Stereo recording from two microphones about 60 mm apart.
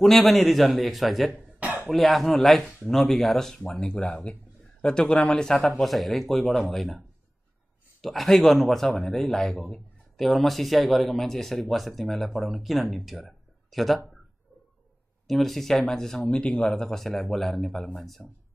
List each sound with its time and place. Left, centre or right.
0.0 s speech: centre
1.3 s cough: right
1.9 s speech: centre
3.9 s speech: centre
8.0 s speech: centre
15.2 s speech: centre
16.7 s speech: centre